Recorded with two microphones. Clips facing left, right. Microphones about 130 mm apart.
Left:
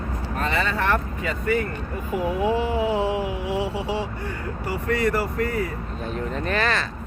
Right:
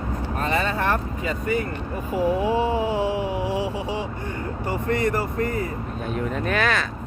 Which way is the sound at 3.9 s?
20° right (ahead or behind).